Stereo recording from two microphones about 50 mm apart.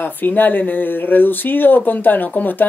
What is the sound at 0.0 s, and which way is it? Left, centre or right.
Speech, left.